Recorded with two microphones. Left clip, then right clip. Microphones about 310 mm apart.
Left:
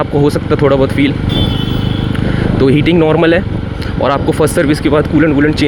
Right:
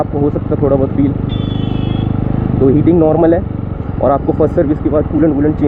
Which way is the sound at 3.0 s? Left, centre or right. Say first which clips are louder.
Left 1 dB; left.